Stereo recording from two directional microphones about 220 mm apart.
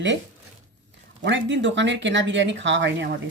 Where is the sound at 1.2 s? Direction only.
55° right (ahead or behind).